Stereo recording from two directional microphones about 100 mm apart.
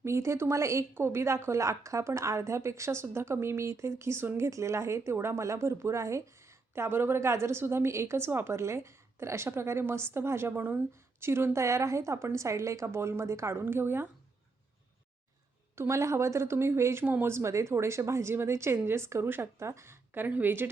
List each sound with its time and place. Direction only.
0.0 s a woman's voice: 30° right (ahead or behind)
15.7 s a woman's voice: 25° right (ahead or behind)